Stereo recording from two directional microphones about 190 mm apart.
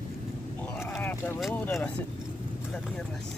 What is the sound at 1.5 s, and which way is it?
Vehicle, 10° left (ahead or behind).